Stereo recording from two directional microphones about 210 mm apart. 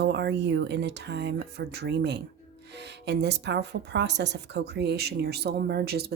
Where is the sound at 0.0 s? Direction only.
55° right (ahead or behind).